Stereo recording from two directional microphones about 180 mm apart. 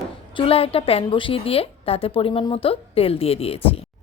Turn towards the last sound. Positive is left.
turn(degrees=35)  # may be behind; listen again after turning